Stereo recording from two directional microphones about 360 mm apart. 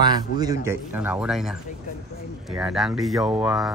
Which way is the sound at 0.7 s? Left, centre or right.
Centre.